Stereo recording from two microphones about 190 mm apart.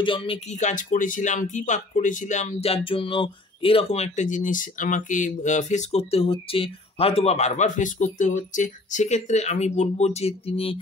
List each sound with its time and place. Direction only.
0.0 s speech: 25° left (ahead or behind)